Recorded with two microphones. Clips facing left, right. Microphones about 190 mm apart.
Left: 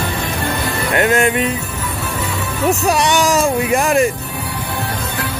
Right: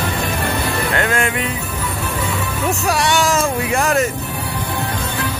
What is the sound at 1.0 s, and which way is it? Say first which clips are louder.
Music: left 7 dB; 20° left (ahead or behind).